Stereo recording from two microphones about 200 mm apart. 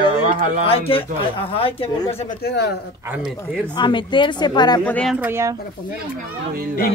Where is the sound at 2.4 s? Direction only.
55° left (ahead or behind).